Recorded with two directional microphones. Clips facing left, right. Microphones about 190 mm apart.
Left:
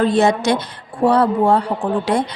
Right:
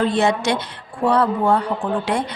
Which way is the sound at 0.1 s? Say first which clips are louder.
Left 3 dB; 40° left (ahead or behind).